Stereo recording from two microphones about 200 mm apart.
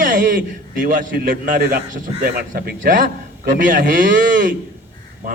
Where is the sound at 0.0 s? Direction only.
40° right (ahead or behind).